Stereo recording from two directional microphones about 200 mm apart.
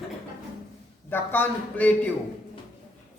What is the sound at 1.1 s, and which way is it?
Speech, 10° left (ahead or behind).